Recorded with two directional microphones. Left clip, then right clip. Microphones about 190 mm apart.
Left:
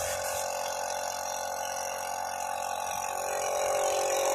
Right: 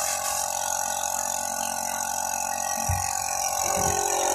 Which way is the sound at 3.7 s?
15° left (ahead or behind).